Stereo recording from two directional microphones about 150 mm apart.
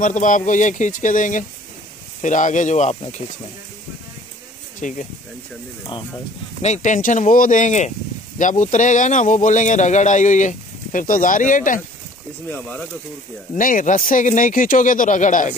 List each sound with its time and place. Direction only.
0.0 s speech: 60° left (ahead or behind)
4.8 s speech: 55° left (ahead or behind)
6.6 s speech: 50° left (ahead or behind)
12.4 s speech: 10° left (ahead or behind)
13.6 s speech: 65° left (ahead or behind)